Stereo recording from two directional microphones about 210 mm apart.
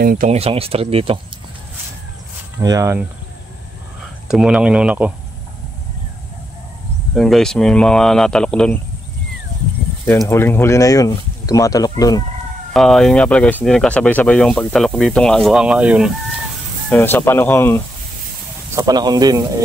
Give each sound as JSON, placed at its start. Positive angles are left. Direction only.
{"t": 0.0, "sound": "speech", "side_deg": -40}
{"t": 0.4, "sound": "speech", "side_deg": -25}
{"t": 2.6, "sound": "speech", "side_deg": -15}
{"t": 4.3, "sound": "speech", "side_deg": -5}
{"t": 7.2, "sound": "speech", "side_deg": 0}
{"t": 10.0, "sound": "speech", "side_deg": 10}
{"t": 12.7, "sound": "speech", "side_deg": 0}
{"t": 16.9, "sound": "speech", "side_deg": 10}
{"t": 18.8, "sound": "speech", "side_deg": -20}